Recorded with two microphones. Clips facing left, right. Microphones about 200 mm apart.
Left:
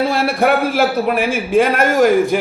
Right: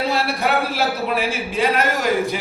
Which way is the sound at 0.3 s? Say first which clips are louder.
Left 6 dB; 50° left (ahead or behind).